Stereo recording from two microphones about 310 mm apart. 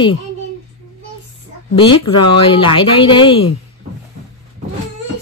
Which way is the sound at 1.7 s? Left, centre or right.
Centre.